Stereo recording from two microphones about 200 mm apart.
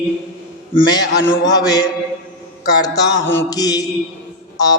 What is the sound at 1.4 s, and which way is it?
Mantra, 20° left (ahead or behind).